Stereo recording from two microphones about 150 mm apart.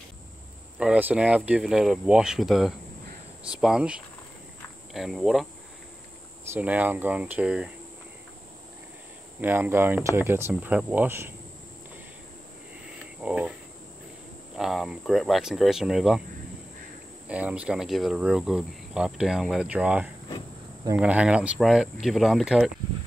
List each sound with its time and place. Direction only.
0.7 s cricket: 10° right (ahead or behind)
6.5 s speech: 10° right (ahead or behind)
9.4 s speech: 15° right (ahead or behind)
13.2 s cricket: 10° right (ahead or behind)
14.5 s cricket: centre (ahead or behind)
17.3 s cricket: 10° right (ahead or behind)